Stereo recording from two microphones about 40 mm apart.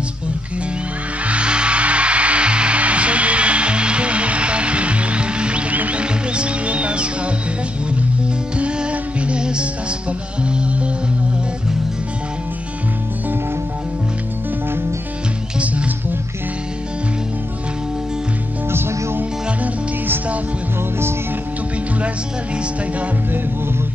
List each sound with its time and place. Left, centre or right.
1.2 s music: right
9.2 s music: right
18.7 s music: right